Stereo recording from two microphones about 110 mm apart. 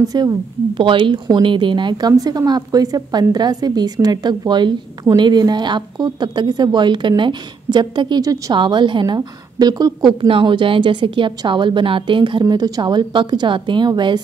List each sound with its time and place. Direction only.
0.0 s speech: 35° right (ahead or behind)
8.5 s a woman's voice: 45° right (ahead or behind)
10.2 s a woman's voice: 50° right (ahead or behind)